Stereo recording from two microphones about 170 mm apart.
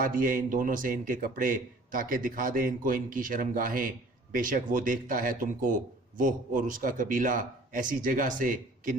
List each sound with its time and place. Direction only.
0.0 s speech: 50° right (ahead or behind)